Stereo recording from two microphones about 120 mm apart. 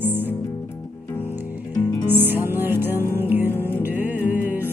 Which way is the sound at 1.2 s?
15° right (ahead or behind).